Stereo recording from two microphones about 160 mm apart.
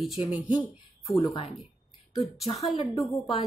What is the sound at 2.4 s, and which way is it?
Speech, 40° left (ahead or behind).